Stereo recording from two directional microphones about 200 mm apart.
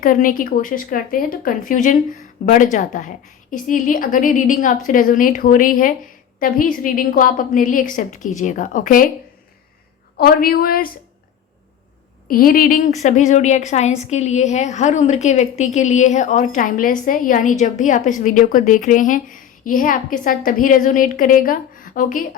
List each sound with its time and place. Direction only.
0.0 s a woman's voice: 40° left (ahead or behind)
10.2 s speech: 50° left (ahead or behind)
12.3 s a woman's voice: 45° left (ahead or behind)